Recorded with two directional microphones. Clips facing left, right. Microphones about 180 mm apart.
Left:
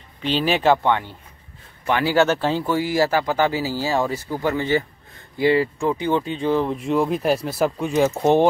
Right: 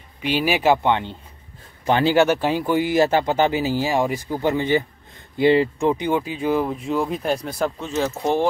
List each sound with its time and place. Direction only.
0.2 s speech: 10° right (ahead or behind)
1.9 s speech: 30° right (ahead or behind)
2.1 s speech: 15° right (ahead or behind); by 8.5 s 20° left (ahead or behind)